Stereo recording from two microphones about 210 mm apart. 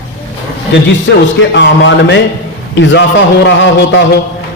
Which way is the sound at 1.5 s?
55° left (ahead or behind).